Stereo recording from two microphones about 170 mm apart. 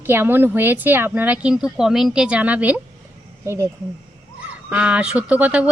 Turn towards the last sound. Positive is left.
turn(degrees=-5)  # may be behind; listen again after turning